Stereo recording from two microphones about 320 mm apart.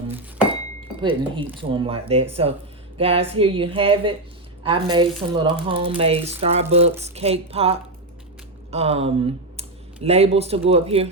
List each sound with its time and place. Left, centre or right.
1.5 s speech: centre